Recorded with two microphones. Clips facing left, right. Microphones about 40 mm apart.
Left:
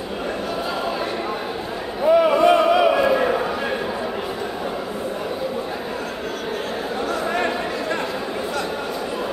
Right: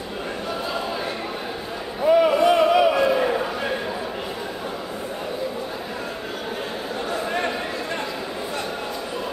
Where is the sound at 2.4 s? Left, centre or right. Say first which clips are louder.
Left 2 dB; left.